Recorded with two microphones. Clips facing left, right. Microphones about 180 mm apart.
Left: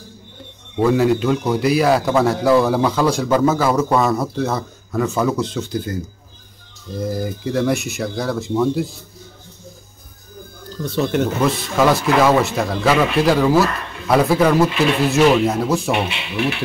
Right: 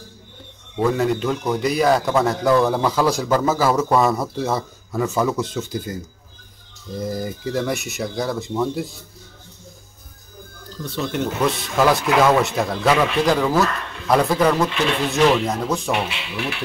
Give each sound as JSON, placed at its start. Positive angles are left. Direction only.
{"t": 0.7, "sound": "a man's voice", "side_deg": 5}
{"t": 7.0, "sound": "a man's voice", "side_deg": 0}
{"t": 11.4, "sound": "a man's voice", "side_deg": 0}
{"t": 15.9, "sound": "speech", "side_deg": 20}